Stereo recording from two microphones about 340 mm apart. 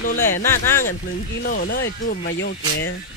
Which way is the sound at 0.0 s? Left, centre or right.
Left.